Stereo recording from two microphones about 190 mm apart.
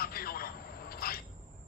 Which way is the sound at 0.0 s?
50° left (ahead or behind).